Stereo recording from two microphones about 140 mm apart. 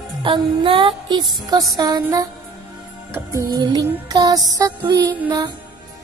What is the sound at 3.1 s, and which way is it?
Music, 25° right (ahead or behind).